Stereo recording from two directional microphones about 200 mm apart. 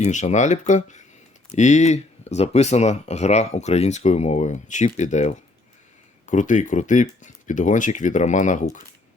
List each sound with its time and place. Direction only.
0.0 s speech: 35° left (ahead or behind)